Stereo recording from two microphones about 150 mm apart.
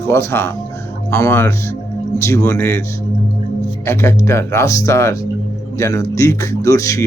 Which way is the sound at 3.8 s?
20° left (ahead or behind).